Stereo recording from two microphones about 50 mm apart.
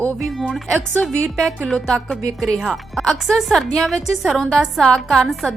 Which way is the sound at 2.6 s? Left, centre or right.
Centre.